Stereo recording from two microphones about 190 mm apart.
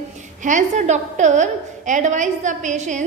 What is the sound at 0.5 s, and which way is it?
A woman's voice, 40° right (ahead or behind).